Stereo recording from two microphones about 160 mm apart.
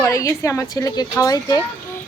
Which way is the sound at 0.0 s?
20° left (ahead or behind).